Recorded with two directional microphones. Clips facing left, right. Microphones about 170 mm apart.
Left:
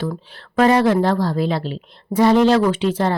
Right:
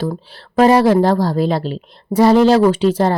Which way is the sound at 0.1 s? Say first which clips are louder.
Right 3 dB; 35° right (ahead or behind).